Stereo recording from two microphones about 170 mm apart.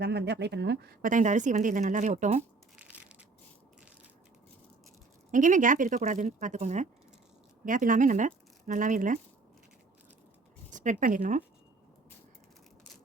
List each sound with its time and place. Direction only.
0.0 s speech: 80° right
1.0 s a woman's voice: 45° right (ahead or behind)
2.7 s crushing: 10° right (ahead or behind)
5.3 s a woman's voice: 50° right (ahead or behind)
10.7 s speech: 50° right (ahead or behind)